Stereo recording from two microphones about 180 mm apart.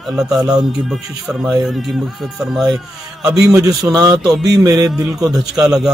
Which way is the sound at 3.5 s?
20° right (ahead or behind).